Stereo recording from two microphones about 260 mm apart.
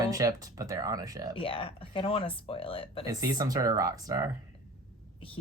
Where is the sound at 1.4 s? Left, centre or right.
Left.